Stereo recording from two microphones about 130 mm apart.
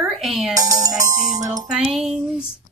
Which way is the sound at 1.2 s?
65° right (ahead or behind).